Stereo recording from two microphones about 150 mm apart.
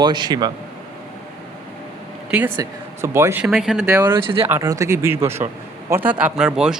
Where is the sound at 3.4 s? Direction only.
5° right (ahead or behind).